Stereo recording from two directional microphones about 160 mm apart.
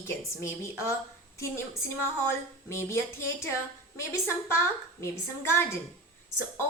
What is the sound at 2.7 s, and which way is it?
A woman's voice, 15° left (ahead or behind).